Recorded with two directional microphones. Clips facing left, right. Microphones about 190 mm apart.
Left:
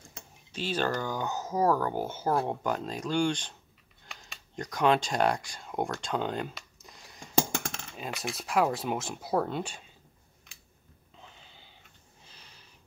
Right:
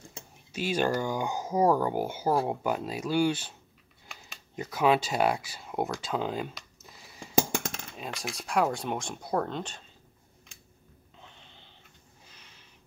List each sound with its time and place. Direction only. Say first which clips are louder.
0.5 s speech: right 3 dB; 10° right (ahead or behind)
4.0 s a sound: even; 5° right (ahead or behind)
7.9 s speech: left 4 dB; centre (ahead or behind)
11.1 s snort: left 1 dB; centre (ahead or behind)
12.3 s snort: left 3 dB; 35° left (ahead or behind)